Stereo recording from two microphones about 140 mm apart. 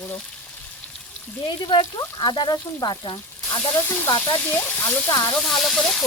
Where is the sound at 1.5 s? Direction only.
30° left (ahead or behind).